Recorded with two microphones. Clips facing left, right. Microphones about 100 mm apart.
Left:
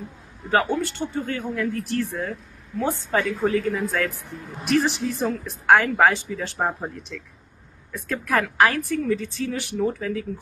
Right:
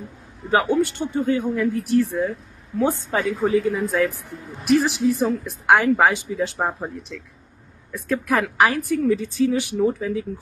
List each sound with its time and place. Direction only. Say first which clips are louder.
0.5 s speech: right 3 dB; 15° right (ahead or behind)
3.4 s speech: right 3 dB; 5° right (ahead or behind)
8.1 s speech: right 2 dB; 10° right (ahead or behind)